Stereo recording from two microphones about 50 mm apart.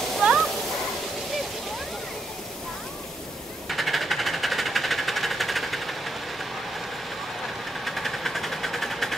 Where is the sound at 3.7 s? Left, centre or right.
Centre.